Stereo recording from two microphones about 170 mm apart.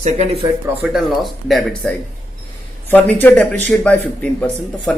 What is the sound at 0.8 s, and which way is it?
Speech, centre (ahead or behind).